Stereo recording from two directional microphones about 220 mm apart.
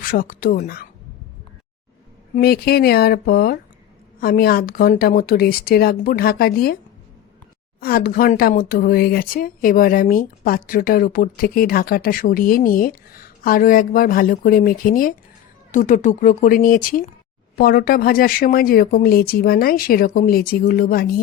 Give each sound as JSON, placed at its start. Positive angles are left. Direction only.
{"t": 0.0, "sound": "speech", "side_deg": 40}
{"t": 2.3, "sound": "speech", "side_deg": 45}
{"t": 7.8, "sound": "speech", "side_deg": 40}